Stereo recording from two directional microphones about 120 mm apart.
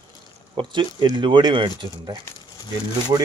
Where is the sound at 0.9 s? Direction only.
40° right (ahead or behind).